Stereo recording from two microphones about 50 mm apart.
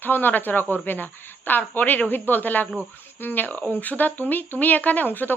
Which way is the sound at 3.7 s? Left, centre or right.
Left.